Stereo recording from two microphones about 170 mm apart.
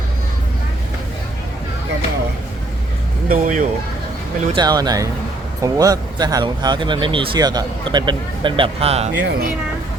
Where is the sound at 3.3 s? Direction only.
50° right (ahead or behind).